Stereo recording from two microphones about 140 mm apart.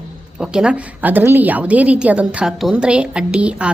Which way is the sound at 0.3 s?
5° right (ahead or behind).